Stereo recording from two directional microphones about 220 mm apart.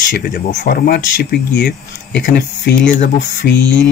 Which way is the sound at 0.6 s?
45° left (ahead or behind).